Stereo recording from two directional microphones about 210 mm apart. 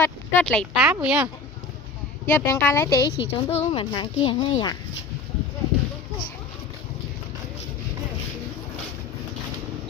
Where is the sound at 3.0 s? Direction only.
55° left (ahead or behind).